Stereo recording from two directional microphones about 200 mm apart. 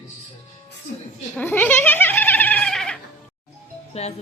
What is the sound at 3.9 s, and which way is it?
Speech, 30° left (ahead or behind).